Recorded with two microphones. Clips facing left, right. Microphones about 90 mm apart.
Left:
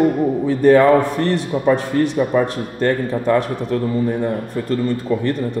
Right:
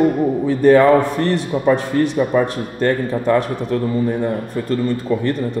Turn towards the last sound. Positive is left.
turn(degrees=-20)  # may be behind; listen again after turning